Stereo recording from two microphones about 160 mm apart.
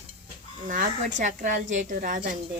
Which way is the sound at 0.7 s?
55° right (ahead or behind).